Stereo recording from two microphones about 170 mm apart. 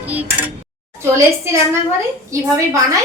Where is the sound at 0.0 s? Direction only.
10° right (ahead or behind).